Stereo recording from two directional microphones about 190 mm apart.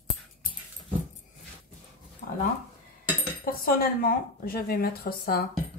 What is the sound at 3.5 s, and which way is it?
Speech, 50° left (ahead or behind).